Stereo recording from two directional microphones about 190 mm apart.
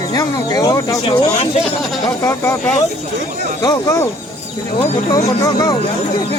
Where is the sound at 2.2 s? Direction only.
15° left (ahead or behind).